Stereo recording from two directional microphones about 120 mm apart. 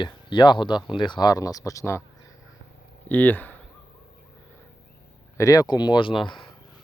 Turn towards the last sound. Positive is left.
turn(degrees=40)  # may be behind; listen again after turning